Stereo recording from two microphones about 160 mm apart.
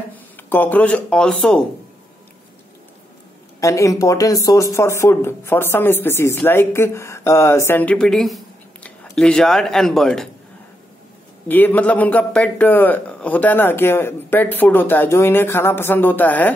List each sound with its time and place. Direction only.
0.1 s speech: 10° left (ahead or behind)
3.6 s a man's voice: 20° left (ahead or behind); by 10.3 s 5° left (ahead or behind)
11.4 s a man's voice: 10° left (ahead or behind)